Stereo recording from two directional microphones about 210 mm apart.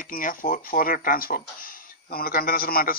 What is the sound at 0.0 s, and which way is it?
Speech, 40° left (ahead or behind).